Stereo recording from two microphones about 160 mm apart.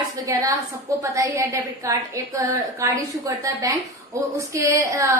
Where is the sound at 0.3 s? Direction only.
20° right (ahead or behind).